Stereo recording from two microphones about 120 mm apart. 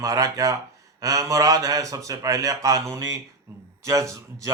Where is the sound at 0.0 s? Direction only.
30° right (ahead or behind).